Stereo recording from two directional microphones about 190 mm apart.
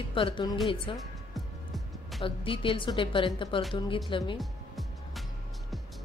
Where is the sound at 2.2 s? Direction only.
25° left (ahead or behind).